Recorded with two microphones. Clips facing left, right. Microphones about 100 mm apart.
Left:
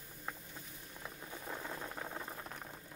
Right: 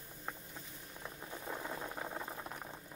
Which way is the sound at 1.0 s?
5° right (ahead or behind).